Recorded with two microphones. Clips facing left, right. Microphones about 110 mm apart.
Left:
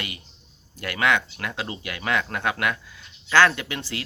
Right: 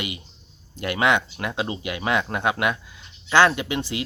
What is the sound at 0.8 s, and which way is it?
Speech, 20° right (ahead or behind).